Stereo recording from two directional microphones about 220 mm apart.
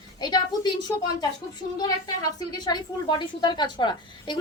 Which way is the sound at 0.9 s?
10° left (ahead or behind).